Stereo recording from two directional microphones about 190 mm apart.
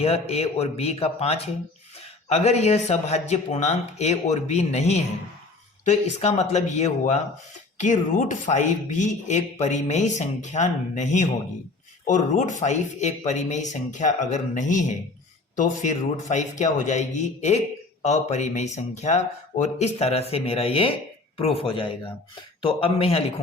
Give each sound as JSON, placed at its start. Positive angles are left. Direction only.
{"t": 0.0, "sound": "speech", "side_deg": 30}